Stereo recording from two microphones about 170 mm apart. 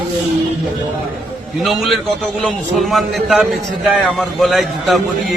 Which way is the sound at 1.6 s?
Centre (ahead or behind).